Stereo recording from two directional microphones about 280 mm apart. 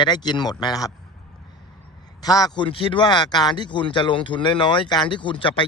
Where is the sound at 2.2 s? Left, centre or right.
Centre.